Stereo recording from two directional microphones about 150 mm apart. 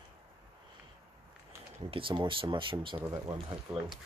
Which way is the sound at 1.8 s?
35° right (ahead or behind).